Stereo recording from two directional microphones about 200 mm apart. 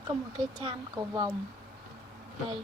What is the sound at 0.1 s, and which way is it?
Speech, 20° right (ahead or behind).